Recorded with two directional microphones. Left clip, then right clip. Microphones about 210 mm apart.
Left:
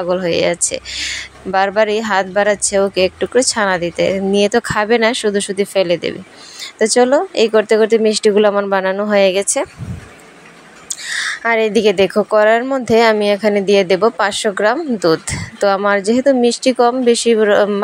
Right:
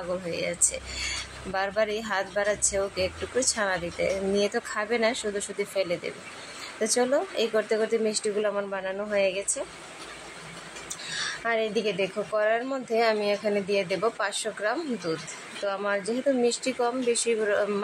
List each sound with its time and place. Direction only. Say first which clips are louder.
0.1 s speech: left 15 dB; 35° left (ahead or behind)
10.9 s speech: left 13 dB; 35° left (ahead or behind)